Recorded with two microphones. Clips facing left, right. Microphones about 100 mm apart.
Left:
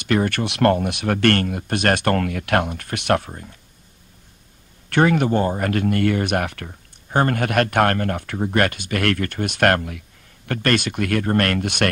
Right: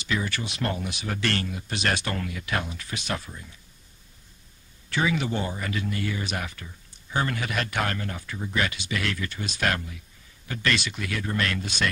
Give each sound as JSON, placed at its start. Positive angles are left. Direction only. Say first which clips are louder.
{"t": 0.0, "sound": "speech", "louder": "left 9 dB", "side_deg": 60}
{"t": 4.8, "sound": "speech", "louder": "left 9 dB", "side_deg": 60}